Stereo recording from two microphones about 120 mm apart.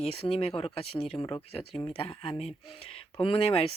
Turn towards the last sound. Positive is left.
turn(degrees=55)  # may be behind; listen again after turning